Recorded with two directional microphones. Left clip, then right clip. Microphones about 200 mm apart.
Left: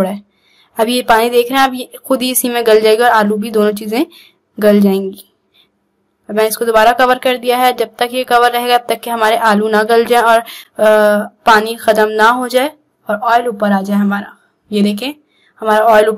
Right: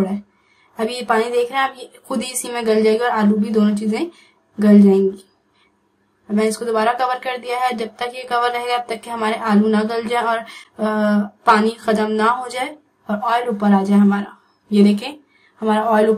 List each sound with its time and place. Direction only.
0.7 s speech: 50° left (ahead or behind)
6.2 s a woman's voice: 45° left (ahead or behind)